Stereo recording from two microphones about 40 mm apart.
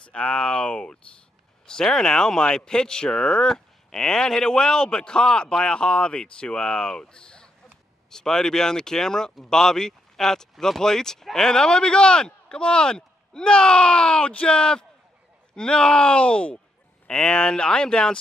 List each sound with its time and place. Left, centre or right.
0.0 s speech: left
1.7 s a man's voice: centre